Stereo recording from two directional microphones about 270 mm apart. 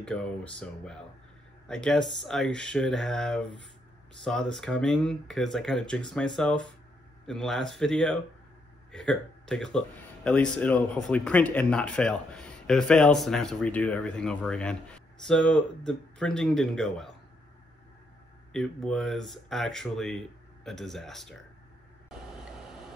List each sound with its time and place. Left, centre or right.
0.0 s speech: centre
18.5 s speech: centre